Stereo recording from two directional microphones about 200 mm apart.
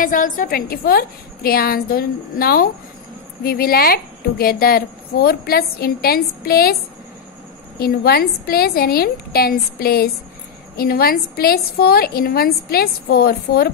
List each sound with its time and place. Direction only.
0.0 s a woman's voice: 40° left (ahead or behind)
7.8 s a woman's voice: 50° left (ahead or behind)